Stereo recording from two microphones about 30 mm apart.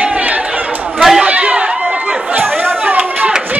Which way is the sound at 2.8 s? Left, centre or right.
Right.